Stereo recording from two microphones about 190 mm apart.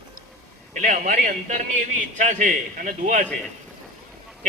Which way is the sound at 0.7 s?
45° right (ahead or behind).